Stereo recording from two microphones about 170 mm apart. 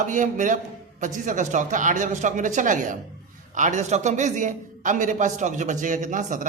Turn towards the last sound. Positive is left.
turn(degrees=-50)  # may be behind; listen again after turning